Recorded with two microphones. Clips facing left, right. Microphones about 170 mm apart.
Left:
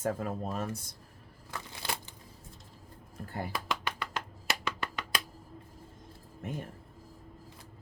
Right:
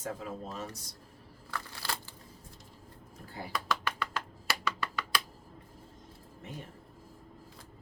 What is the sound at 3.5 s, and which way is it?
Music, 20° left (ahead or behind).